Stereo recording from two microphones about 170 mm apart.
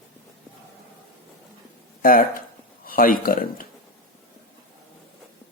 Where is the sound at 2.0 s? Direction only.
55° left (ahead or behind).